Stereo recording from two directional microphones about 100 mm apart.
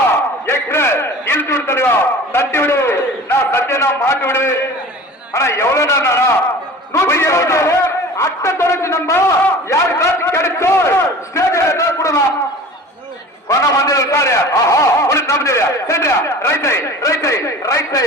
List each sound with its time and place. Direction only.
0.4 s a sound: 25° left (ahead or behind)
2.3 s a man's voice: 25° left (ahead or behind)
13.5 s a man's voice: 35° left (ahead or behind)